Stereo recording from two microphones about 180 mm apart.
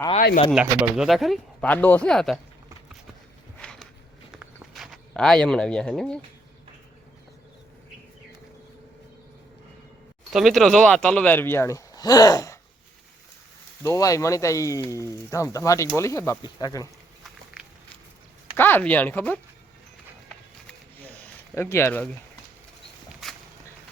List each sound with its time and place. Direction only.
0.5 s speech: 5° right (ahead or behind)
3.6 s a sound: 5° left (ahead or behind)
10.3 s speech: centre (ahead or behind); by 12.5 s 20° left (ahead or behind)
13.8 s speech: 20° left (ahead or behind)
17.2 s walk: 5° right (ahead or behind)
18.5 s speech: 10° left (ahead or behind)
20.7 s zipper: 10° left (ahead or behind)